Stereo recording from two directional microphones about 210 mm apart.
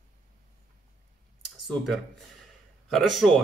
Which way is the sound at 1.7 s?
Centre (ahead or behind).